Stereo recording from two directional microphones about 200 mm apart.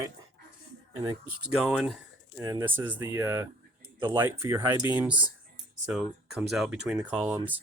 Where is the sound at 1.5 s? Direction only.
5° right (ahead or behind).